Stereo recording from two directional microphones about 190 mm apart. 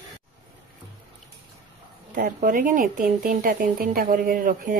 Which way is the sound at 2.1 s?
45° right (ahead or behind).